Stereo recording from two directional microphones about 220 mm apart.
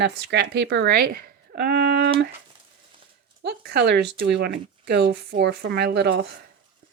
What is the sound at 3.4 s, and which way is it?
Speech, 45° right (ahead or behind).